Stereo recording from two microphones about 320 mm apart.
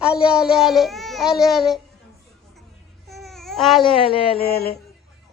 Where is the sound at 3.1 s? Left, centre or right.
Centre.